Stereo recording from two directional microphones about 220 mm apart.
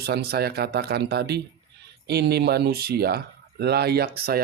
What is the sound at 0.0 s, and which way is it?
Speech, 45° right (ahead or behind).